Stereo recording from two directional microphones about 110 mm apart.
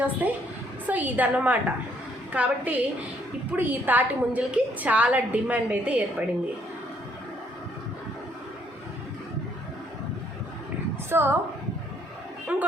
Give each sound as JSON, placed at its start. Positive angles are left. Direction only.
{"t": 0.0, "sound": "a woman's voice", "side_deg": -15}
{"t": 11.1, "sound": "speech", "side_deg": -20}
{"t": 12.5, "sound": "a woman's voice", "side_deg": -15}